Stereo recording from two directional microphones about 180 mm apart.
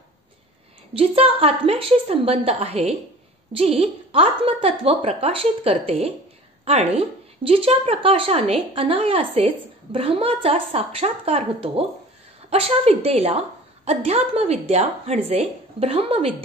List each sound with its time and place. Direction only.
0.9 s a woman's voice: 30° right (ahead or behind)